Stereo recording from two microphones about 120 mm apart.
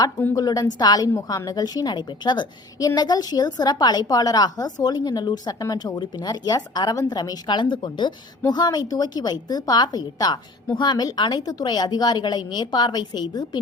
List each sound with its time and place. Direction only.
0.3 s a woman's voice: 30° left (ahead or behind)